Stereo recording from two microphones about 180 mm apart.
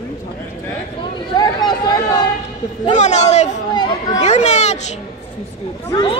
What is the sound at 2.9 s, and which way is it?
Speech, 40° left (ahead or behind).